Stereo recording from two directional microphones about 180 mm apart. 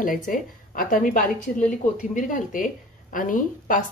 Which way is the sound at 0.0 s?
50° left (ahead or behind).